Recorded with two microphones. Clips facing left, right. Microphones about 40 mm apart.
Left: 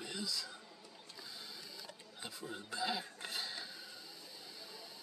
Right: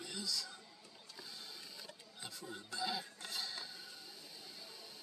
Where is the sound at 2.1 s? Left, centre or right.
Left.